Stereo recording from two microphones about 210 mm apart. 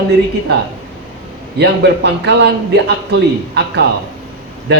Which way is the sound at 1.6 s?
55° right (ahead or behind).